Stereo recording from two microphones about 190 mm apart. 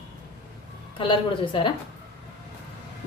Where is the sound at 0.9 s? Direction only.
25° left (ahead or behind).